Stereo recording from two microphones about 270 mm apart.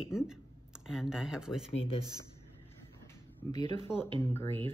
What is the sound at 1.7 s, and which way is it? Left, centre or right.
Speech, left.